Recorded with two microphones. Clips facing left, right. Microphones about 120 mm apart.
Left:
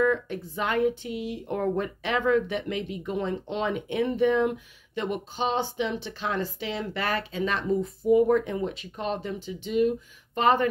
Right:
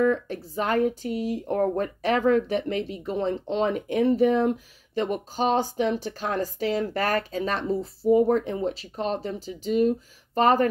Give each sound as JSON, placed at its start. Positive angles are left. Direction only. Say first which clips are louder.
{"t": 0.0, "sound": "speech", "louder": "right 2 dB", "side_deg": -35}